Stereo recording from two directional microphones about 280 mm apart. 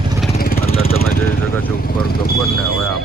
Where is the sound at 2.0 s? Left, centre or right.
Left.